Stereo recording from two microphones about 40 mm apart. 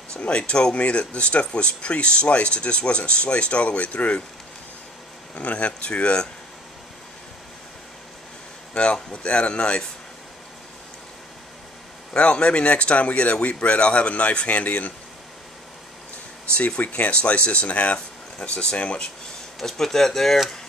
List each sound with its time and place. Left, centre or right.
0.2 s speech: left
5.3 s speech: left
8.7 s speech: left
12.1 s speech: left
16.5 s speech: left
17.9 s speech: left
19.6 s speech: centre